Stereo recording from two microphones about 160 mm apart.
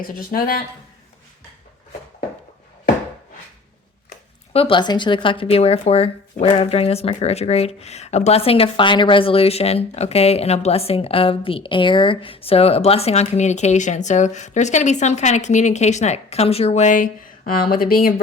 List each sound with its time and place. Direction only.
0.0 s speech: 65° left (ahead or behind)
4.5 s speech: 35° left (ahead or behind); by 18.1 s 65° left (ahead or behind)